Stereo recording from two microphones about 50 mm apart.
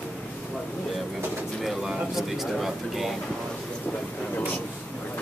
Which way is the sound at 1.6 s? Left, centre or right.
Centre.